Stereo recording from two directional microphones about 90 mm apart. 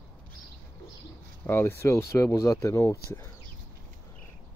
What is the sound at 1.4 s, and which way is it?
Speech, 25° left (ahead or behind).